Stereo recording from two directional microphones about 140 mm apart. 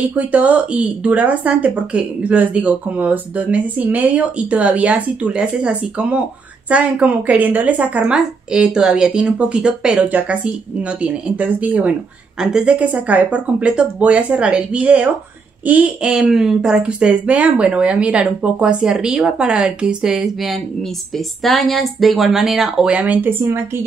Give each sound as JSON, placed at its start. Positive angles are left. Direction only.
{"t": 0.1, "sound": "speech", "side_deg": -10}